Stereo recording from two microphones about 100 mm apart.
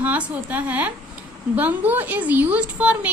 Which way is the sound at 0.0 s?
15° right (ahead or behind).